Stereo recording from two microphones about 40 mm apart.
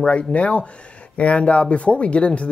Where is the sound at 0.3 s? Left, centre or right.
Left.